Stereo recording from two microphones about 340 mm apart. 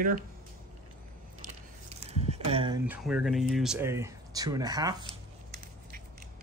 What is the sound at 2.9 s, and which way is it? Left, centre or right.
Speech, centre.